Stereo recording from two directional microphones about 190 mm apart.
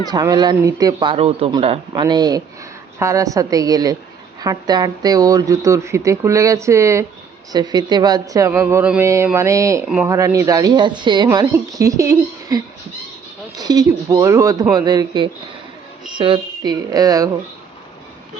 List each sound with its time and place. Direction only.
0.1 s speech: 20° right (ahead or behind)
9.8 s speech: 5° right (ahead or behind)
10.1 s speech: 15° right (ahead or behind)